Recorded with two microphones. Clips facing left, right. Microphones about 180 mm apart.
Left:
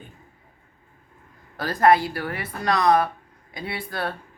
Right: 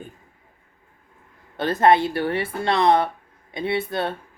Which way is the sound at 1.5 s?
25° right (ahead or behind).